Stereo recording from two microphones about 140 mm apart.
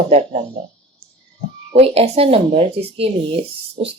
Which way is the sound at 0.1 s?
50° right (ahead or behind).